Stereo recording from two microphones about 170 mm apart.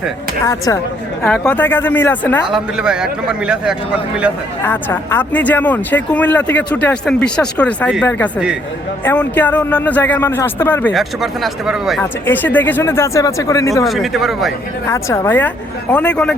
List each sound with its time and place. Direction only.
0.4 s speech: 20° left (ahead or behind)
1.2 s speech: 5° left (ahead or behind)
2.5 s a man's voice: 5° right (ahead or behind)
4.6 s speech: 10° left (ahead or behind)
9.0 s speech: 10° left (ahead or behind)
10.9 s a man's voice: centre (ahead or behind)
12.2 s speech: 10° left (ahead or behind)
13.8 s a man's voice: centre (ahead or behind)
14.8 s speech: 15° left (ahead or behind)